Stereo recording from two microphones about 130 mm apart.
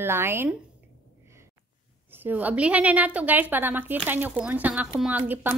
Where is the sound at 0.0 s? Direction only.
20° right (ahead or behind).